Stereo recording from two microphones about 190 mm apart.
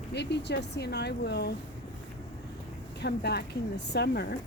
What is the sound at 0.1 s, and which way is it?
Speech, 65° left (ahead or behind).